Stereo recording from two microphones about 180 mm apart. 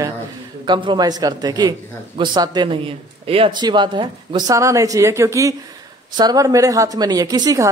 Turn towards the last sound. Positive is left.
turn(degrees=-20)  # may be behind; listen again after turning